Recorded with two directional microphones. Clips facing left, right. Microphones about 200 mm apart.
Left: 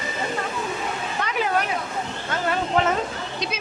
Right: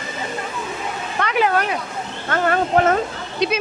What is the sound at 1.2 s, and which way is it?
Speech, 70° right (ahead or behind).